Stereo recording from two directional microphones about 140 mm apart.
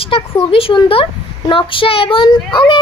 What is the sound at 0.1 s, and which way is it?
A child's voice, 40° left (ahead or behind).